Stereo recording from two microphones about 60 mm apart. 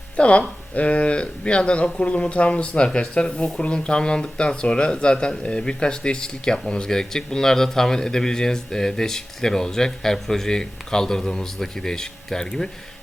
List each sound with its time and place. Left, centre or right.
0.2 s speech: left